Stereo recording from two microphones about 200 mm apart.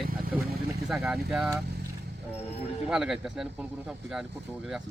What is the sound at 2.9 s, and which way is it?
Speech, centre (ahead or behind).